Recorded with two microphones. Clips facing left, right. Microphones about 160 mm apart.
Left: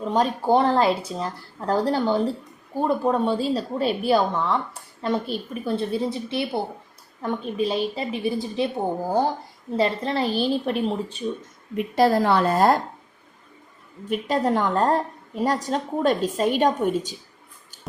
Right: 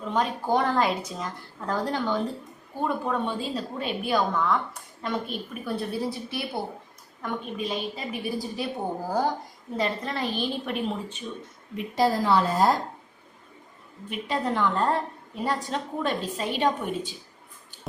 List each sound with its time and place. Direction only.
0.1 s a woman's voice: 35° left (ahead or behind)
11.8 s a woman's voice: 60° left (ahead or behind)
14.1 s a woman's voice: 40° left (ahead or behind)